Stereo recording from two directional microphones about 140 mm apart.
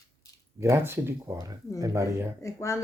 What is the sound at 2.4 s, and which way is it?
Speech, 20° left (ahead or behind).